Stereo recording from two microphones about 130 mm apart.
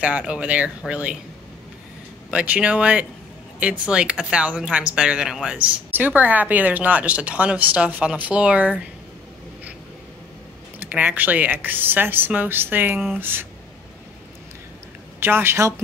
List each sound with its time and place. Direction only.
0.0 s speech: 10° right (ahead or behind)
2.3 s speech: 10° right (ahead or behind)
10.9 s speech: 10° right (ahead or behind)
15.1 s a woman's voice: 15° right (ahead or behind)